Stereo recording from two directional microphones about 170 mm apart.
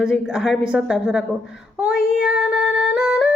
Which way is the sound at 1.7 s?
5° right (ahead or behind).